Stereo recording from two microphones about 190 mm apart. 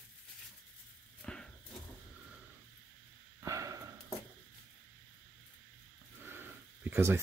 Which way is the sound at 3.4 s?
15° right (ahead or behind).